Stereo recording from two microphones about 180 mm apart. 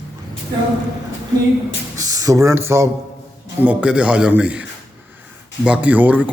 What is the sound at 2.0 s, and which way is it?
A man's voice, 20° right (ahead or behind).